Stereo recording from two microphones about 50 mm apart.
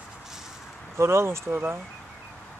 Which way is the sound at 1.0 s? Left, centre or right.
Right.